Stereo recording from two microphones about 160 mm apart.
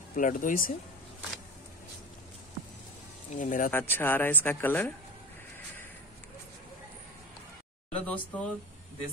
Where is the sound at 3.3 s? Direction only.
55° left (ahead or behind).